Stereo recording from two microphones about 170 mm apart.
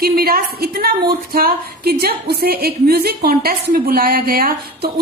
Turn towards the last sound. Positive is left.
turn(degrees=-65)  # may be behind; listen again after turning